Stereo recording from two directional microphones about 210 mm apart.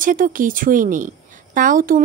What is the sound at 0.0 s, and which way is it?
Speech, 40° right (ahead or behind).